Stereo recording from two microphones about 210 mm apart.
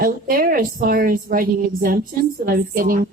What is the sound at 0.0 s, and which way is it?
A woman's voice, 45° right (ahead or behind).